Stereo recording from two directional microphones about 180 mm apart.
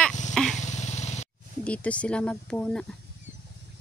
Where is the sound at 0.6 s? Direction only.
40° left (ahead or behind).